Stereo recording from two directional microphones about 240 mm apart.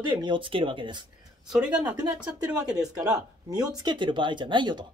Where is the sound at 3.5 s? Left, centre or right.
Centre.